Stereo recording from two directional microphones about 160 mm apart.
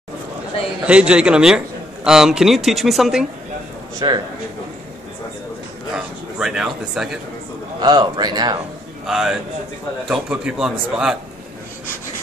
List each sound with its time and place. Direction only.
0.8 s speech: 5° right (ahead or behind)
4.0 s a man's voice: 25° right (ahead or behind)
5.9 s speech: 5° right (ahead or behind)
7.8 s a man's voice: 25° right (ahead or behind)
9.0 s speech: 5° right (ahead or behind)